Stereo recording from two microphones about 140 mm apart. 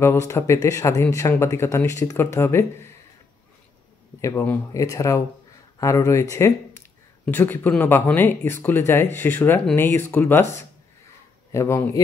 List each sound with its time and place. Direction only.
0.0 s speech: 20° left (ahead or behind)
4.2 s speech: 20° left (ahead or behind)
11.5 s speech: 20° left (ahead or behind)